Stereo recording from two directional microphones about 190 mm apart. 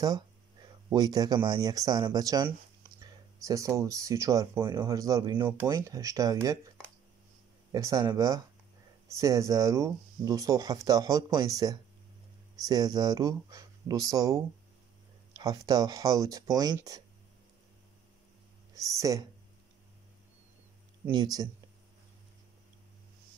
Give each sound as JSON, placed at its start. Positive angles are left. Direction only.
{"t": 0.0, "sound": "speech", "side_deg": -20}
{"t": 7.7, "sound": "speech", "side_deg": -20}
{"t": 18.8, "sound": "speech", "side_deg": -15}
{"t": 21.1, "sound": "speech", "side_deg": -20}